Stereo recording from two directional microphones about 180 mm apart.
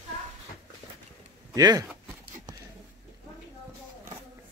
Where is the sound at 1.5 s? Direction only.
20° right (ahead or behind).